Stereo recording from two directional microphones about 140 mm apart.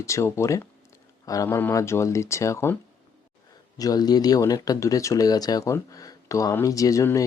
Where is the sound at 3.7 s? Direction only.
25° left (ahead or behind).